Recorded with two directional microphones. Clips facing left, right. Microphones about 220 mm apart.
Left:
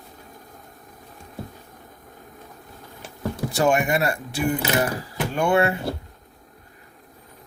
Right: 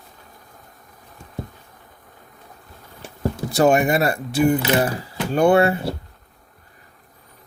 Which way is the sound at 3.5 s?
35° right (ahead or behind).